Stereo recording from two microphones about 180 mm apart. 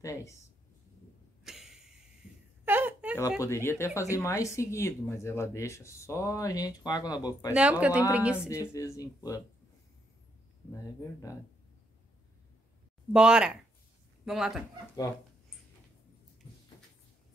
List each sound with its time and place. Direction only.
0.0 s a sound: 15° left (ahead or behind)
1.4 s a sound: centre (ahead or behind)
3.3 s speech: 15° left (ahead or behind)
7.5 s speech: 5° right (ahead or behind)
8.7 s speech: 20° left (ahead or behind)
11.0 s speech: 20° left (ahead or behind)
13.1 s speech: 5° right (ahead or behind)